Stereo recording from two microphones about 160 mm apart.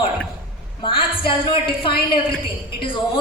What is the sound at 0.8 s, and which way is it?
Speech, 30° left (ahead or behind).